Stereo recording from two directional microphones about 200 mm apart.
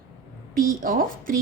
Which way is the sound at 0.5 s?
45° right (ahead or behind).